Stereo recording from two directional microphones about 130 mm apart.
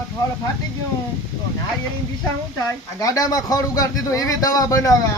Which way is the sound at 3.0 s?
25° left (ahead or behind).